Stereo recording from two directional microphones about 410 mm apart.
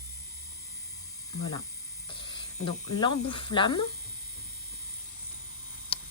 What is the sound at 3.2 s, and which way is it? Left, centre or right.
Speech, centre.